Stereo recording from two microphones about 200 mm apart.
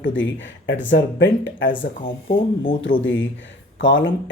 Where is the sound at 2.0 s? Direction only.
25° left (ahead or behind).